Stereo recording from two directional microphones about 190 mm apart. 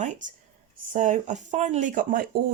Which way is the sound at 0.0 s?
40° right (ahead or behind).